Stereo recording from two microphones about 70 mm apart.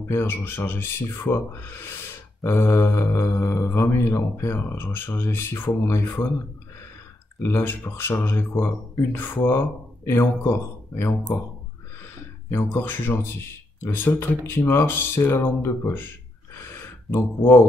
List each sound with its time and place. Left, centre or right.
0.0 s speech: left
7.4 s speech: left
12.4 s speech: left
16.5 s gasp: left